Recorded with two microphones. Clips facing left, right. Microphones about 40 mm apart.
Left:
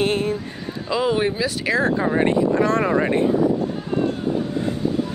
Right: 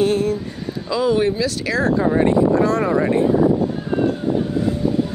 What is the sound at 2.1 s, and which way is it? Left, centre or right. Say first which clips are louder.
Speech: right 2 dB; left.